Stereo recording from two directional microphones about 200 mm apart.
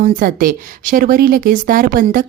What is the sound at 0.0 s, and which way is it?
A woman's voice, 45° right (ahead or behind).